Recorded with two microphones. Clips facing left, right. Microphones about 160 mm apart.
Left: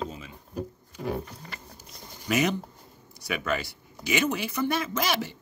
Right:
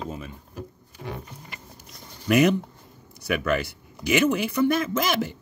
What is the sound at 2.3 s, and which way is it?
Speech, 55° right (ahead or behind).